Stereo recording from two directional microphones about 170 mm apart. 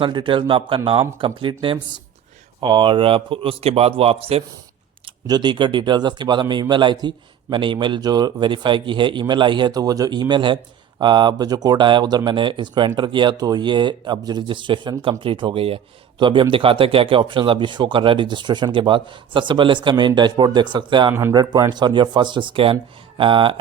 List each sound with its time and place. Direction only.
0.0 s a man's voice: 30° right (ahead or behind)
5.2 s a man's voice: 25° right (ahead or behind)
21.1 s a man's voice: 15° right (ahead or behind); by 23.6 s 30° right (ahead or behind)